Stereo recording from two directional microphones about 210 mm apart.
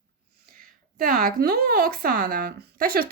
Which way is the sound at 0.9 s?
45° right (ahead or behind).